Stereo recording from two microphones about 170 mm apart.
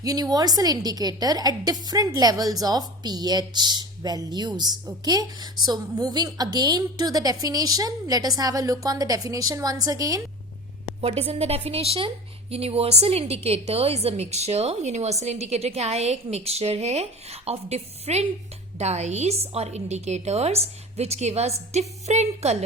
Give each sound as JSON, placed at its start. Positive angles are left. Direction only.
{"t": 0.0, "sound": "a woman's voice", "side_deg": -20}
{"t": 11.0, "sound": "a woman's voice", "side_deg": -35}